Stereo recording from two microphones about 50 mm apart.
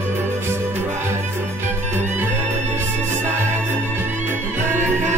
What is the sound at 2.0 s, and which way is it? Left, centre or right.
Music, right.